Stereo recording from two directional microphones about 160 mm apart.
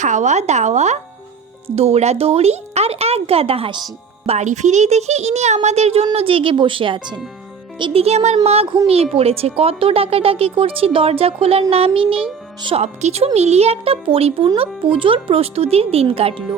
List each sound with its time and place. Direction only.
0.0 s a child's voice: 50° right (ahead or behind); by 3.9 s 30° right (ahead or behind)
4.3 s a child's voice: 45° right (ahead or behind)